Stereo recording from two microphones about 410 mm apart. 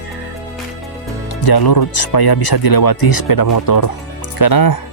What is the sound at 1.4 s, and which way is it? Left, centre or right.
Speech, left.